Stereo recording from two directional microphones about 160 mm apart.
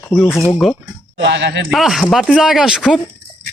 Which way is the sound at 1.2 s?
90° right.